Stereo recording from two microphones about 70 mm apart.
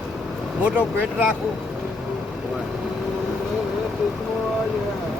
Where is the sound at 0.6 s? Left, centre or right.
Centre.